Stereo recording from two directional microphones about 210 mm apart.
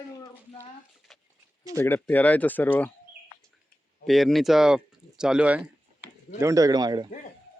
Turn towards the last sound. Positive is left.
turn(degrees=-20)  # may be behind; listen again after turning